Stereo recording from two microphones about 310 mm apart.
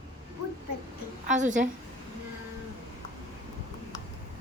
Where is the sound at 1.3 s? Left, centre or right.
Right.